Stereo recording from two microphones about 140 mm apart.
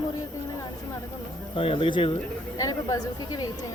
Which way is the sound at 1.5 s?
40° left (ahead or behind).